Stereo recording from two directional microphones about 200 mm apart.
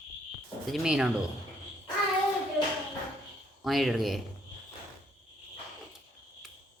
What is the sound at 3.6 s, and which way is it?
Speech, centre (ahead or behind).